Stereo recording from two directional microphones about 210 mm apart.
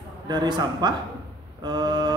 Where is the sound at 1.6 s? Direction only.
20° right (ahead or behind).